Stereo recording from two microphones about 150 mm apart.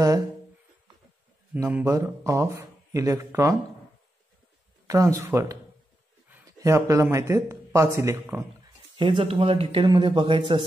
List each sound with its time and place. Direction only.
1.5 s speech: 10° right (ahead or behind)
4.8 s speech: 20° right (ahead or behind)
8.9 s speech: 35° right (ahead or behind)